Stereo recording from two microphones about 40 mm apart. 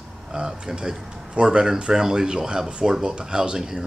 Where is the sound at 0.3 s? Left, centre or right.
Centre.